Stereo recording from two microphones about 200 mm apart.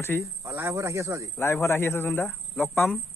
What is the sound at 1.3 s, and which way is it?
Speech, 10° left (ahead or behind).